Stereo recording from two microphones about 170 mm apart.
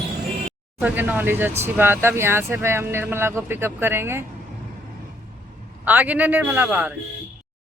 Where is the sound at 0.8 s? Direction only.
10° right (ahead or behind).